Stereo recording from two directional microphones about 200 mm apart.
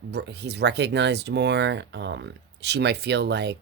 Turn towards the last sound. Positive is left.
turn(degrees=-55)  # may be behind; listen again after turning